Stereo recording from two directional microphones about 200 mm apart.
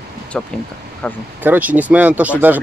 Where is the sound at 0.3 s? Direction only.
5° left (ahead or behind).